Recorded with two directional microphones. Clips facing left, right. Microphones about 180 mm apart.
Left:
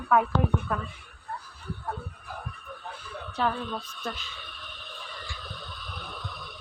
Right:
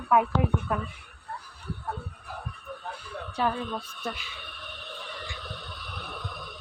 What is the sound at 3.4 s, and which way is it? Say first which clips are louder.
Speech: even; 10° right (ahead or behind).